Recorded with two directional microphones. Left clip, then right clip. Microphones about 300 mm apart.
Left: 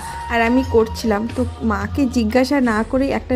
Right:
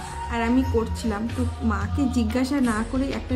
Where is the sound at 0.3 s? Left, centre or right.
Left.